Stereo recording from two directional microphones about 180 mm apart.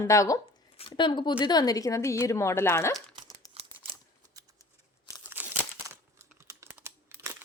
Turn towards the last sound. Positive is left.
turn(degrees=-15)  # may be behind; listen again after turning